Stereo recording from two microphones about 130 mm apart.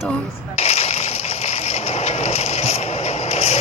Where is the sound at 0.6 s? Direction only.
55° left (ahead or behind).